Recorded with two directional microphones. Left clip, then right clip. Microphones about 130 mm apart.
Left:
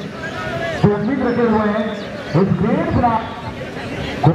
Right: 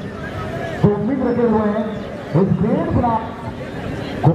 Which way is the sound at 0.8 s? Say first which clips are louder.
Even; 55° left (ahead or behind).